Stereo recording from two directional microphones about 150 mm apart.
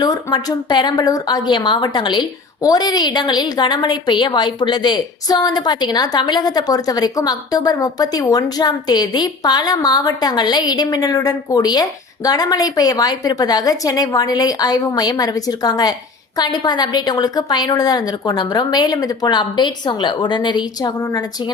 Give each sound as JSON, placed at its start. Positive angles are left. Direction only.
{"t": 0.0, "sound": "a woman's voice", "side_deg": 30}